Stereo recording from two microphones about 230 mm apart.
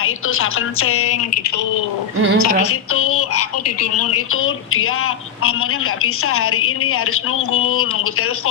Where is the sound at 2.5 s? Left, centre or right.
Left.